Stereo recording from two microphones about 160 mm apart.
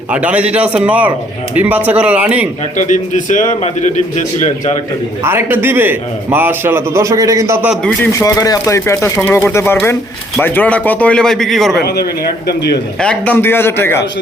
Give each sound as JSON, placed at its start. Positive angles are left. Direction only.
{"t": 0.1, "sound": "a man's voice", "side_deg": -10}
{"t": 2.7, "sound": "a man's voice", "side_deg": 50}
{"t": 5.2, "sound": "a man's voice", "side_deg": -15}
{"t": 8.2, "sound": "a man's voice", "side_deg": 20}
{"t": 11.9, "sound": "speech", "side_deg": 80}
{"t": 13.0, "sound": "a man's voice", "side_deg": 5}